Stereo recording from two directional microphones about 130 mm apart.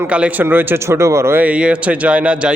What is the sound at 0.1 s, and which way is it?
Speech, 10° right (ahead or behind).